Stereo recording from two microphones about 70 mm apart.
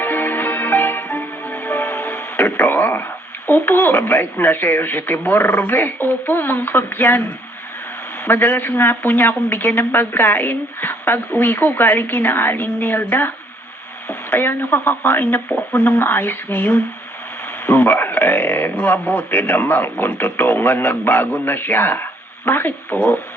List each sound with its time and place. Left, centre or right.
0.0 s music: left
8.2 s a woman's voice: left